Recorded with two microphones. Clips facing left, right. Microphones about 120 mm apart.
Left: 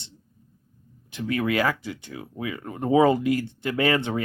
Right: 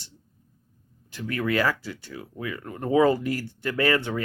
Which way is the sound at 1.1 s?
20° left (ahead or behind).